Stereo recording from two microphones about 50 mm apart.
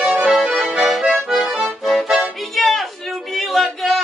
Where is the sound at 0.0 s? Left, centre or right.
Centre.